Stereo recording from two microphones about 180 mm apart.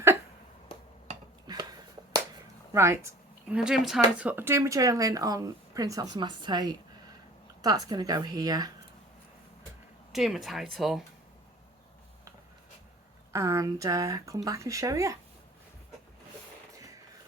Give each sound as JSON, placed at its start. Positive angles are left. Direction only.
{"t": 1.5, "sound": "finger snapping", "side_deg": -20}
{"t": 2.7, "sound": "speech", "side_deg": -15}
{"t": 3.5, "sound": "speech", "side_deg": -5}
{"t": 10.1, "sound": "speech", "side_deg": 0}
{"t": 13.3, "sound": "speech", "side_deg": -15}